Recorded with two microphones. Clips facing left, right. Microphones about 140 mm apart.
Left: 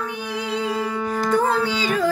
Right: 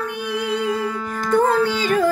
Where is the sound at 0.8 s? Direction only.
15° left (ahead or behind).